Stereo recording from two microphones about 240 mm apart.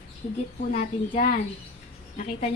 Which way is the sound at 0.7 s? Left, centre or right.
Left.